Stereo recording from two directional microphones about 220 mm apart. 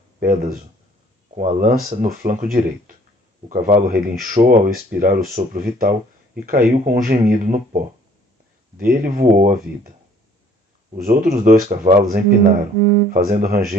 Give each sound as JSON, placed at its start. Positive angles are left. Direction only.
{"t": 0.2, "sound": "speech", "side_deg": -40}
{"t": 11.1, "sound": "speech", "side_deg": -40}